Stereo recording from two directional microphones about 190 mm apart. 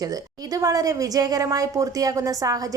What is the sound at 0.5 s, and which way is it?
A woman's voice, 20° right (ahead or behind).